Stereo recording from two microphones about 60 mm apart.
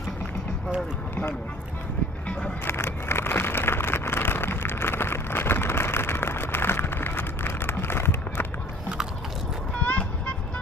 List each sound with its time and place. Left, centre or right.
2.6 s vehicle: left
9.8 s vehicle: centre